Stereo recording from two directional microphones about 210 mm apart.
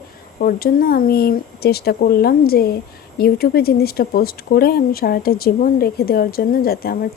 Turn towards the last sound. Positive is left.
turn(degrees=45)  # may be behind; listen again after turning